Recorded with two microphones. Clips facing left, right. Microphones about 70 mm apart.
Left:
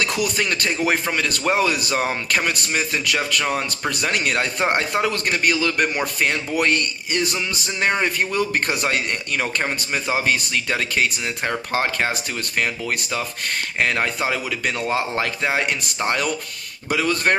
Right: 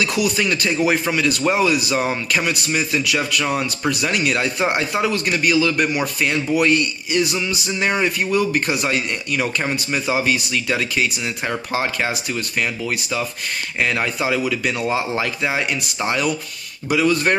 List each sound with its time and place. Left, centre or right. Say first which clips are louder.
0.0 s a man's voice: right 3 dB; left